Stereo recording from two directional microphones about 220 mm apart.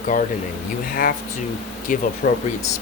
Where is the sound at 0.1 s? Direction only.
35° left (ahead or behind).